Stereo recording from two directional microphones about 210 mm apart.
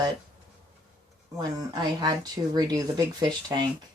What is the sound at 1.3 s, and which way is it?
Speech, 20° right (ahead or behind).